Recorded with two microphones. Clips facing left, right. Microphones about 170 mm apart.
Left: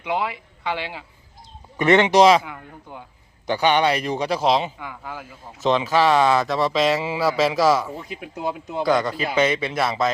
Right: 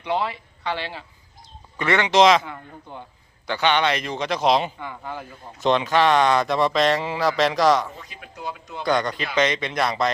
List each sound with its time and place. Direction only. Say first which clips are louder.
0.0 s a man's voice: even; 15° left (ahead or behind)
2.1 s speech: left 2 dB; 10° left (ahead or behind)
8.4 s speech: left 6 dB; 55° left (ahead or behind)
8.8 s speech: left 2 dB; 5° left (ahead or behind)